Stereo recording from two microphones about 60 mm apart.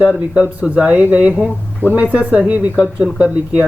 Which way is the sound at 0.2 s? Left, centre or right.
Centre.